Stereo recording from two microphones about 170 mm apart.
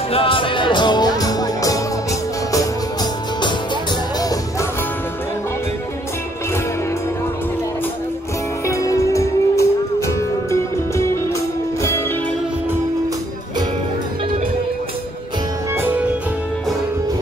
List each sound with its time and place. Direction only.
0.1 s music: 30° left (ahead or behind)
8.6 s music: 20° left (ahead or behind)